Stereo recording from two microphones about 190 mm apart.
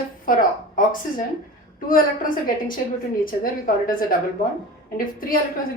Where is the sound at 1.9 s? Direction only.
45° left (ahead or behind).